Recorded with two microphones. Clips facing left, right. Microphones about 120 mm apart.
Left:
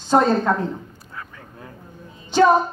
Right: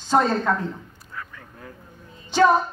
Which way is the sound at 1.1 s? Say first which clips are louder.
Right 1 dB; 20° left (ahead or behind).